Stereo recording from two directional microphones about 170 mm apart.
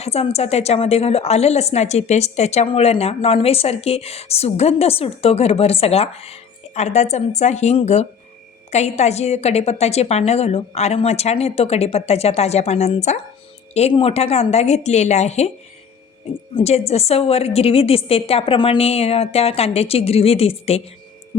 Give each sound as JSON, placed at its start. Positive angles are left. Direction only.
{"t": 0.0, "sound": "a woman's voice", "side_deg": 35}
{"t": 16.6, "sound": "a woman's voice", "side_deg": 35}